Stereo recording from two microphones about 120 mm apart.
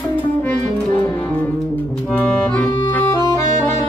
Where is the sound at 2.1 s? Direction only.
15° left (ahead or behind).